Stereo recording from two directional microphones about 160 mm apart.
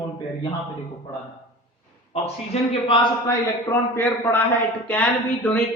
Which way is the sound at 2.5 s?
40° left (ahead or behind).